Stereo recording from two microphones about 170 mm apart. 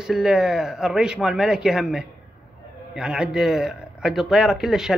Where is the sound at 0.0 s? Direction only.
5° right (ahead or behind).